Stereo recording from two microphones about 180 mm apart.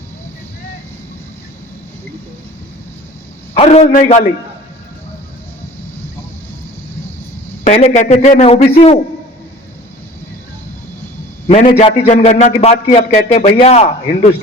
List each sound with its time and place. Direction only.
3.5 s a man's voice: 35° left (ahead or behind)
7.6 s a man's voice: 40° left (ahead or behind)
11.4 s a man's voice: 35° left (ahead or behind)